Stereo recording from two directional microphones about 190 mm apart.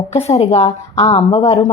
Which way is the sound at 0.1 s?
35° left (ahead or behind).